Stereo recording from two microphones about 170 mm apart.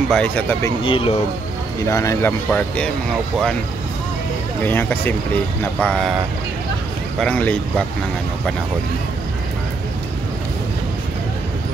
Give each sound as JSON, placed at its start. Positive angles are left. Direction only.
{"t": 0.1, "sound": "speech", "side_deg": 10}
{"t": 0.8, "sound": "speech", "side_deg": 30}
{"t": 1.9, "sound": "speech", "side_deg": 20}
{"t": 2.5, "sound": "speech", "side_deg": 5}
{"t": 4.6, "sound": "speech", "side_deg": 10}
{"t": 7.2, "sound": "speech", "side_deg": 5}